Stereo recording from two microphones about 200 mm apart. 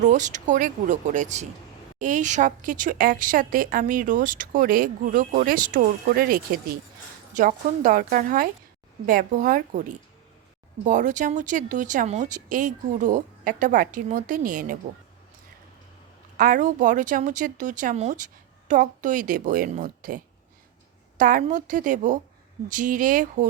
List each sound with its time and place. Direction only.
0.0 s a woman's voice: 40° right (ahead or behind)
16.4 s speech: 40° right (ahead or behind)